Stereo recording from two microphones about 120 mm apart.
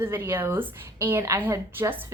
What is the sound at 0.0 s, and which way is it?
A woman's voice, 20° right (ahead or behind).